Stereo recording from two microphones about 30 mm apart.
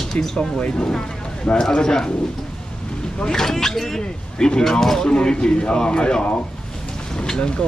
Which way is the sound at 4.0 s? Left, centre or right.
Left.